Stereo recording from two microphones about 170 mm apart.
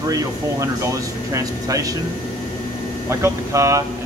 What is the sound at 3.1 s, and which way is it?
Speech, 15° right (ahead or behind).